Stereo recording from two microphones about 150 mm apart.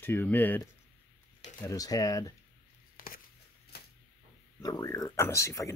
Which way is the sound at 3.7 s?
90° left.